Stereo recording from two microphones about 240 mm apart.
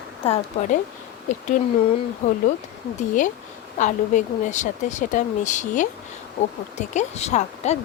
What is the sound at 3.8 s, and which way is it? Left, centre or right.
Speech, left.